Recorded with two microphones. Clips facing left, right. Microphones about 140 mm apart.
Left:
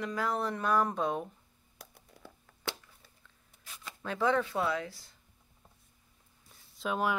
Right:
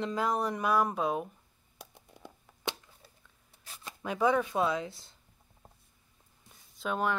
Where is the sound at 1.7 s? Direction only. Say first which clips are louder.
Right 3 dB; 20° right (ahead or behind).